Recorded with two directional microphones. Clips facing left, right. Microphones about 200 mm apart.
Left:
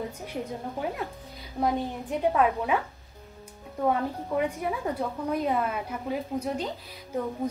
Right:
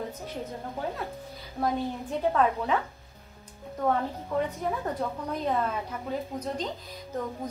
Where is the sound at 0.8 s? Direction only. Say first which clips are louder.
Left 1 dB; 10° left (ahead or behind).